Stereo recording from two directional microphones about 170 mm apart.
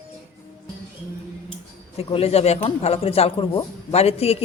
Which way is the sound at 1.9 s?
35° left (ahead or behind).